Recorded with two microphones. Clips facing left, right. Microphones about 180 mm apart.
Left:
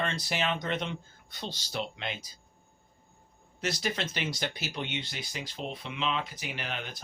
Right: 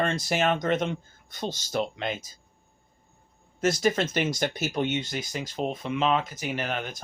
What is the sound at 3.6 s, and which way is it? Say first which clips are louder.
Speech: right 9 dB; 45° right (ahead or behind).